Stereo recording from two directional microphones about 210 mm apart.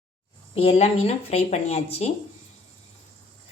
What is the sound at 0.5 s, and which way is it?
Speech, 30° left (ahead or behind).